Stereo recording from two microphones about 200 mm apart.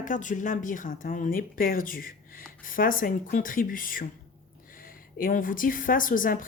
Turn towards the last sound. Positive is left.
turn(degrees=45)  # may be behind; listen again after turning